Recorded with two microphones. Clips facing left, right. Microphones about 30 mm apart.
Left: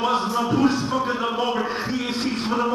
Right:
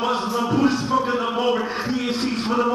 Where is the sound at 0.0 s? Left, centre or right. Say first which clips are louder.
Even; centre.